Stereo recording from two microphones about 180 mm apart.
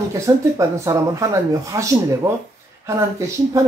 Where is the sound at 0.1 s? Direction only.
15° right (ahead or behind).